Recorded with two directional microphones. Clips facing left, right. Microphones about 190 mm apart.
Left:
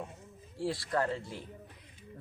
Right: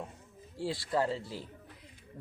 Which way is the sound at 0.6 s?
Centre (ahead or behind).